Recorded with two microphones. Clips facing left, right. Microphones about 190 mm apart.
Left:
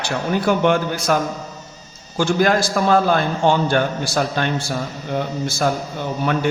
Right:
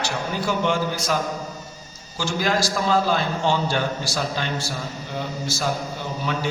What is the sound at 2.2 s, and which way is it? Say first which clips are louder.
A man's voice: left 6 dB; 55° left (ahead or behind).